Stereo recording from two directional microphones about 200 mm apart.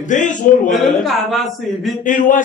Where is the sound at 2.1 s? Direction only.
40° left (ahead or behind).